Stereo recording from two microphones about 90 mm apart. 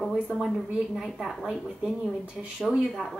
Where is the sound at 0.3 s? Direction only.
5° left (ahead or behind); by 2.5 s 15° right (ahead or behind).